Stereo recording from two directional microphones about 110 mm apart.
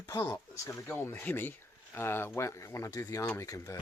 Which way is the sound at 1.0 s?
20° left (ahead or behind).